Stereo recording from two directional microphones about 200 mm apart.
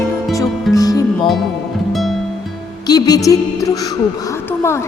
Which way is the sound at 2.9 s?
20° left (ahead or behind).